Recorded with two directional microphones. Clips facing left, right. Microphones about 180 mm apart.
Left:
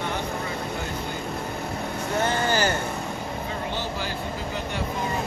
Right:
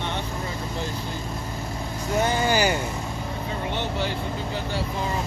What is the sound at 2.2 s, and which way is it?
Speech, 15° right (ahead or behind).